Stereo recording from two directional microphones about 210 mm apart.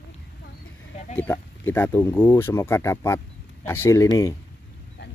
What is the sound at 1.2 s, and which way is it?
Speech, 10° left (ahead or behind).